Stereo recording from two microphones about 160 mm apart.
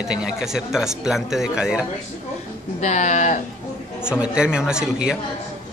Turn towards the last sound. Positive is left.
turn(degrees=-5)  # may be behind; listen again after turning